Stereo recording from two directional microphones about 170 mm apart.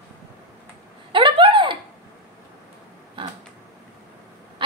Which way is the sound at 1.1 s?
30° right (ahead or behind).